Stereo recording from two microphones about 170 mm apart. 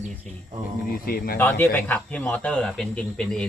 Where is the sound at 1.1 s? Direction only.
60° left (ahead or behind).